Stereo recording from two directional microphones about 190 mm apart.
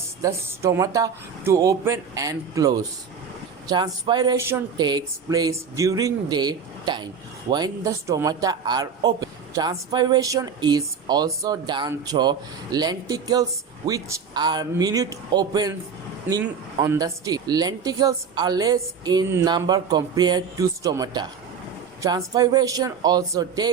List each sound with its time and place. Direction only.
0.2 s a woman's voice: 15° right (ahead or behind)